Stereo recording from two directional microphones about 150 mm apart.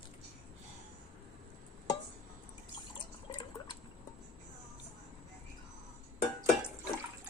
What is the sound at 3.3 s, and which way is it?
Liquid, 30° left (ahead or behind).